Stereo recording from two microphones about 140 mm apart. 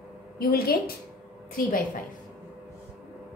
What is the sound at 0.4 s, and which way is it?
Speech, 90° left.